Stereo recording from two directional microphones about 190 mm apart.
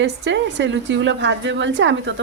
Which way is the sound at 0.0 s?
65° right (ahead or behind).